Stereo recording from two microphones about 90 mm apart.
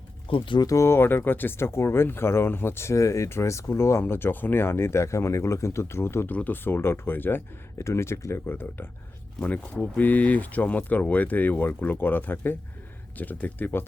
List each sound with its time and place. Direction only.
0.3 s speech: 70° left (ahead or behind)
0.6 s speech: 35° left (ahead or behind); by 13.8 s 20° left (ahead or behind)